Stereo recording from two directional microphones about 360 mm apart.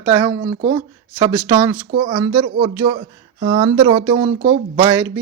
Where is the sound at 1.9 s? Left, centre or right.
Centre.